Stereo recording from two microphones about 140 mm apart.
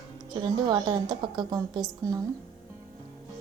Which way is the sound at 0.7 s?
30° right (ahead or behind).